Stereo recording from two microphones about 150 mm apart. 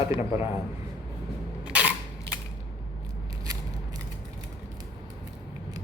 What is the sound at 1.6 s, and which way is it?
Single-lens reflex camera, 10° right (ahead or behind).